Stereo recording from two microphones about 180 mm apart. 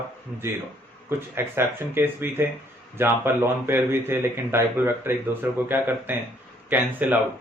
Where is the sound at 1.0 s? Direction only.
15° right (ahead or behind).